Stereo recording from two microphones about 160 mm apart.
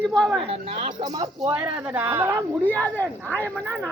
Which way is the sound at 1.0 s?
25° right (ahead or behind).